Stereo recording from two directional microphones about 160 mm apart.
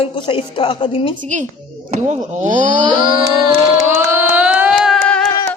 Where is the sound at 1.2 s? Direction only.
50° right (ahead or behind).